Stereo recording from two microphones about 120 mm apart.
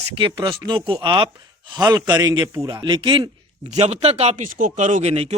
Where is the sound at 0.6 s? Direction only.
45° right (ahead or behind).